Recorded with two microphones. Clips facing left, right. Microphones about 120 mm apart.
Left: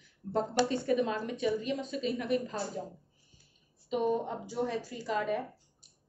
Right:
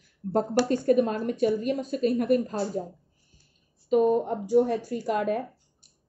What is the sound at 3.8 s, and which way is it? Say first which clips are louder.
Speech: right 8 dB; 45° right (ahead or behind).